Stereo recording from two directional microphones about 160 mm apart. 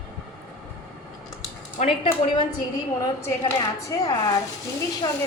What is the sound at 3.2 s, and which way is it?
A woman's voice, 25° left (ahead or behind).